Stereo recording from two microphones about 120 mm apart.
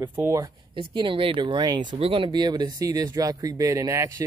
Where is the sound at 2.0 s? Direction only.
55° right (ahead or behind).